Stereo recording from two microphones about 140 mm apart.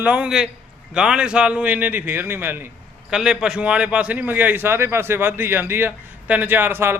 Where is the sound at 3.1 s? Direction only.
5° right (ahead or behind).